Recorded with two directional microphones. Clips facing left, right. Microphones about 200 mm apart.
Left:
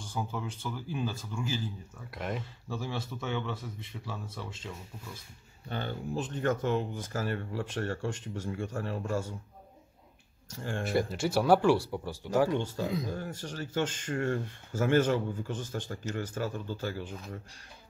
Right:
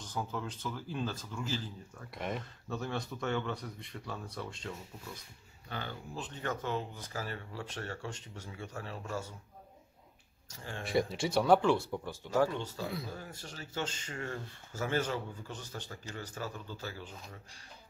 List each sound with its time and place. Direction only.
0.0 s speech: 10° left (ahead or behind)
5.7 s speech: 25° left (ahead or behind)
6.1 s speech: 50° left (ahead or behind)
10.5 s speech: 50° left (ahead or behind)
10.9 s speech: centre (ahead or behind); by 13.1 s 20° left (ahead or behind)
13.1 s speech: 50° left (ahead or behind)